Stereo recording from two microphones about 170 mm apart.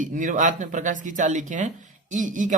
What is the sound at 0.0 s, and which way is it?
Speech, 50° right (ahead or behind).